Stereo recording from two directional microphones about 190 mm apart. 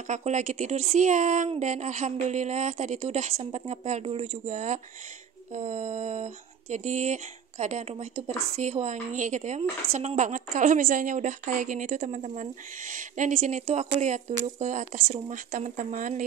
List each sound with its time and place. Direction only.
0.1 s speech: 35° right (ahead or behind)